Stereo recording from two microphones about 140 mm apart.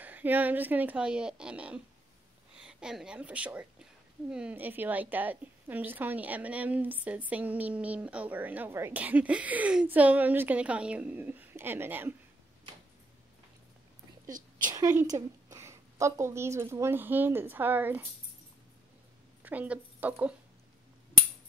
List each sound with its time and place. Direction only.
0.0 s a woman's voice: 10° right (ahead or behind)
14.7 s a woman's voice: 25° right (ahead or behind)
19.4 s a woman's voice: 10° right (ahead or behind)